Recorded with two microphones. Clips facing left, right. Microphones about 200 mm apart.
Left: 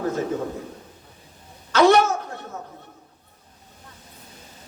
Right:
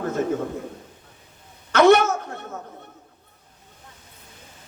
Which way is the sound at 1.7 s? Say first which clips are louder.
Right 1 dB; 55° right (ahead or behind).